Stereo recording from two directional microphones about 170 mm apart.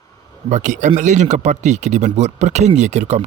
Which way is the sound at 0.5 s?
45° right (ahead or behind).